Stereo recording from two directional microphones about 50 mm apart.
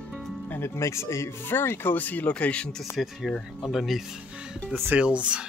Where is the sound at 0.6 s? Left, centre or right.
Left.